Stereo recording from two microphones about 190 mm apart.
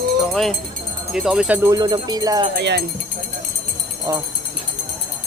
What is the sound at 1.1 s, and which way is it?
Speech, centre (ahead or behind).